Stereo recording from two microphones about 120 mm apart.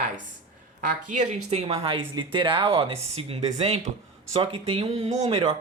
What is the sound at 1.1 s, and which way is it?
Speech, 60° right (ahead or behind).